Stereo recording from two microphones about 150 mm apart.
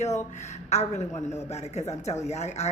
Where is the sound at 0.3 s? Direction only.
50° left (ahead or behind).